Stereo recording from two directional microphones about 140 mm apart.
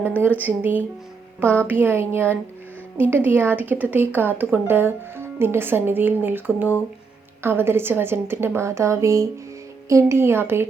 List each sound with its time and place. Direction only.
0.2 s speech: 10° right (ahead or behind)